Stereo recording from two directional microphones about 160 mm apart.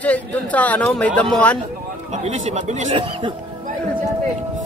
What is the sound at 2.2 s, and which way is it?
Speech, 45° right (ahead or behind).